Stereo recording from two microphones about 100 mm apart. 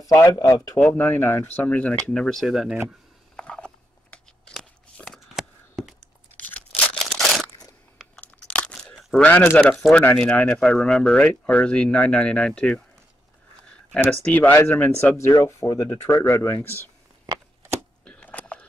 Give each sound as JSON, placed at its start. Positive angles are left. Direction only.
{"t": 0.7, "sound": "speech", "side_deg": 20}
{"t": 3.3, "sound": "crunch", "side_deg": 10}
{"t": 5.0, "sound": "a sound", "side_deg": 0}
{"t": 6.7, "sound": "crumpling", "side_deg": 5}
{"t": 8.2, "sound": "crunch", "side_deg": 10}
{"t": 9.2, "sound": "speech", "side_deg": 20}
{"t": 9.6, "sound": "speech", "side_deg": 5}
{"t": 13.9, "sound": "speech", "side_deg": 10}
{"t": 15.1, "sound": "speech", "side_deg": 30}
{"t": 17.3, "sound": "a sound", "side_deg": -45}
{"t": 18.0, "sound": "a sound", "side_deg": 15}